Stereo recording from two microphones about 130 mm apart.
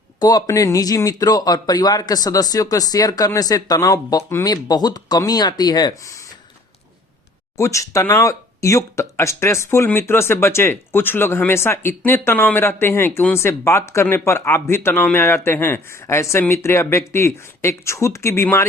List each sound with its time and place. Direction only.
0.2 s speech: 30° left (ahead or behind)
7.5 s speech: 25° left (ahead or behind)